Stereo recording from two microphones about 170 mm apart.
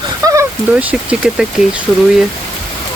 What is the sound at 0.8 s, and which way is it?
Speech, 10° right (ahead or behind).